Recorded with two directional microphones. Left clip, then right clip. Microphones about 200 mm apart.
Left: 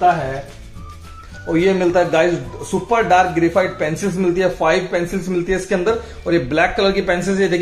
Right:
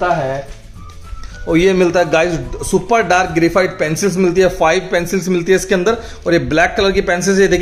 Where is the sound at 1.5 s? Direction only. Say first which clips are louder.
Right 3 dB; 45° right (ahead or behind).